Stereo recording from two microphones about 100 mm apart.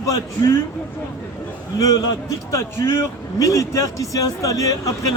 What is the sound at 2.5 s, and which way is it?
Speech, 30° left (ahead or behind).